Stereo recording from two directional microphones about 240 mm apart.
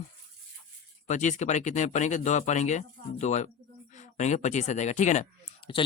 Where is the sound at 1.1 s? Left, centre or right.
Left.